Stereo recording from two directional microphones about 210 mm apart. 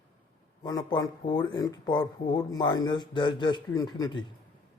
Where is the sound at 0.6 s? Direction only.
15° left (ahead or behind).